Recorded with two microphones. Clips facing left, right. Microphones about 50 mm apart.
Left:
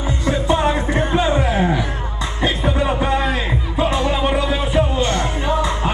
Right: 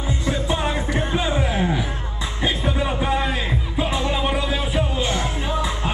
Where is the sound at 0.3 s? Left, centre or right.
Centre.